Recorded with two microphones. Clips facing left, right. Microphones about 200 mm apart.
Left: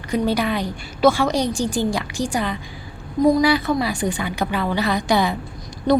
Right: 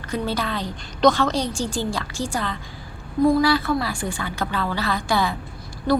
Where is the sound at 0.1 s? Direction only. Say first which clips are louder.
Left 5 dB; 15° left (ahead or behind).